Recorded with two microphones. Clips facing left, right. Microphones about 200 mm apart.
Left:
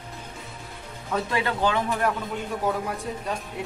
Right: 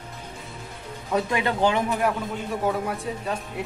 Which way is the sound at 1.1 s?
15° right (ahead or behind).